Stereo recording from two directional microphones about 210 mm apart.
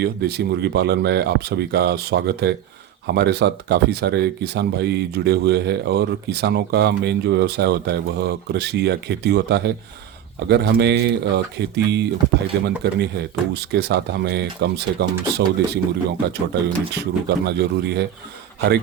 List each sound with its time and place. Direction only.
0.0 s speech: 50° right (ahead or behind)